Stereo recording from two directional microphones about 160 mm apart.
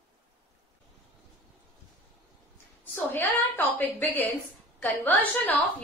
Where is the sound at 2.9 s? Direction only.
15° left (ahead or behind).